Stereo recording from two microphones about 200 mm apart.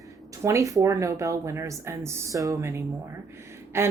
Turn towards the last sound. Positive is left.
turn(degrees=-15)  # may be behind; listen again after turning